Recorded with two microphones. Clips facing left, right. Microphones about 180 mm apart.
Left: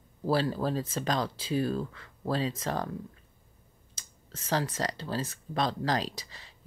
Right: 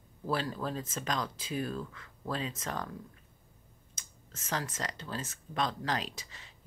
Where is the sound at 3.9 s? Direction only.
30° left (ahead or behind).